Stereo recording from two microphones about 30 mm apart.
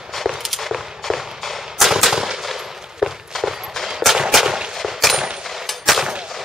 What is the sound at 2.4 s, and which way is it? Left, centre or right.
Machine gun, centre.